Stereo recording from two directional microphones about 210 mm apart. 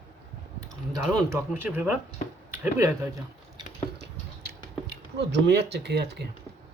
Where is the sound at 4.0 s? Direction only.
55° right (ahead or behind).